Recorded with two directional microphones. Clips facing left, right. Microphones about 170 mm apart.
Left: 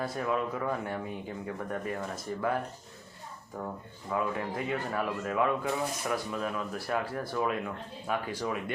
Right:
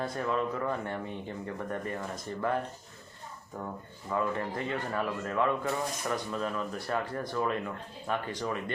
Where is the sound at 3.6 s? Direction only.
5° left (ahead or behind).